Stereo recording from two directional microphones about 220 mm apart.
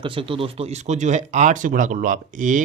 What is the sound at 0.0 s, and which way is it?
Speech, 25° right (ahead or behind).